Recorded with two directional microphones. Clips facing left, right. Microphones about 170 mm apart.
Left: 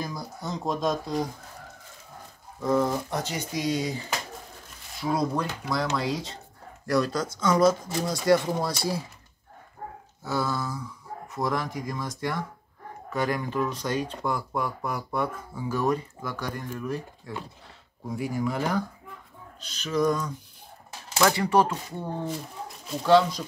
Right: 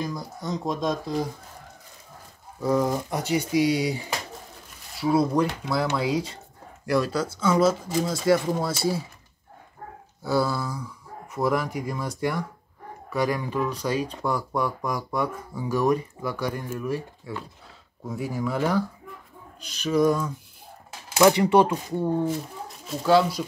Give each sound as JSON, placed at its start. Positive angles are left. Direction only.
{"t": 0.0, "sound": "speech", "side_deg": 5}
{"t": 2.6, "sound": "speech", "side_deg": -10}
{"t": 10.2, "sound": "speech", "side_deg": -10}
{"t": 14.2, "sound": "speech", "side_deg": 10}
{"t": 15.2, "sound": "speech", "side_deg": -15}
{"t": 21.2, "sound": "speech", "side_deg": -20}